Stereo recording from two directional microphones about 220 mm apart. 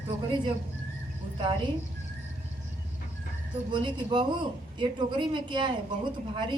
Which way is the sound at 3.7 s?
20° right (ahead or behind).